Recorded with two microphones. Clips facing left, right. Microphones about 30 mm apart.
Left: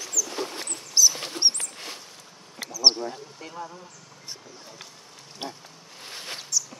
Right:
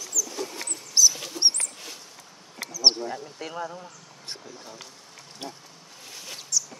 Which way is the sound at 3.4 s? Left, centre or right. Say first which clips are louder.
Right 4 dB; right.